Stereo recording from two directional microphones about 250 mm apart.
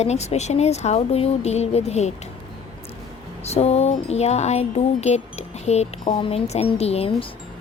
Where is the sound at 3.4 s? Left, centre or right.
Left.